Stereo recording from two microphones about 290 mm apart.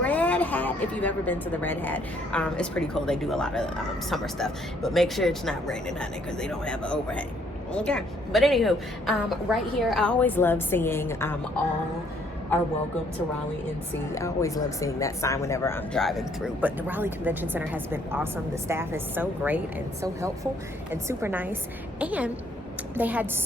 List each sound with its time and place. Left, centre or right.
0.0 s a woman's voice: centre
14.2 s a woman's voice: centre